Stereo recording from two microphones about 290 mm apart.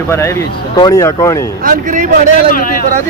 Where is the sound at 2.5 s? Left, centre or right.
Left.